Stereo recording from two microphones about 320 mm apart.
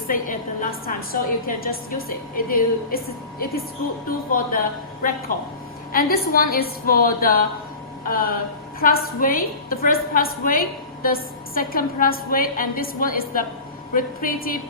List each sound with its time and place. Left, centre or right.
0.1 s a woman's voice: left
5.9 s a woman's voice: left